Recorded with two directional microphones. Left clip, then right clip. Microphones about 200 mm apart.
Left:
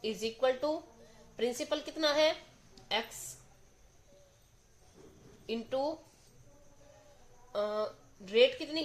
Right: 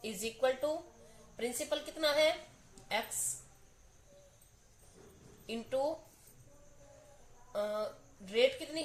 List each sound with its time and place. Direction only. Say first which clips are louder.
0.0 s speech: left 2 dB; 35° left (ahead or behind)
5.5 s speech: left 1 dB; 30° left (ahead or behind)
7.5 s speech: left 2 dB; 40° left (ahead or behind)